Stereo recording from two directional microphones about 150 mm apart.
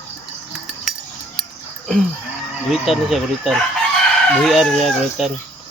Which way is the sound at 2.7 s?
Centre (ahead or behind).